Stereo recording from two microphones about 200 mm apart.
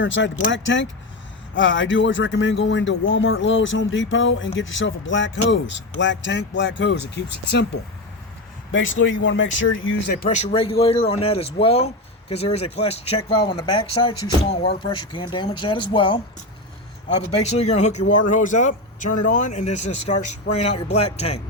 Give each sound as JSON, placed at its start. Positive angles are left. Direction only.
{"t": 0.0, "sound": "speech", "side_deg": 70}
{"t": 8.7, "sound": "speech", "side_deg": 70}
{"t": 17.3, "sound": "speech", "side_deg": 35}